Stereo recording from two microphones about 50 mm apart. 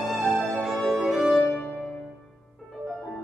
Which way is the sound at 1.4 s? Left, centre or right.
Left.